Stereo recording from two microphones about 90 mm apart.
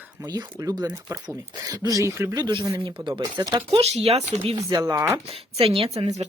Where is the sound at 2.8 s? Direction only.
65° right (ahead or behind).